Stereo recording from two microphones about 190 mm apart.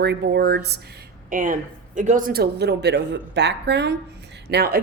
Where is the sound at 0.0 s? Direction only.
60° right (ahead or behind).